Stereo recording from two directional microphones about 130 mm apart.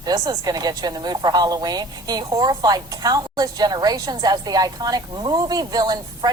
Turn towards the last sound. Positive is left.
turn(degrees=-30)  # may be behind; listen again after turning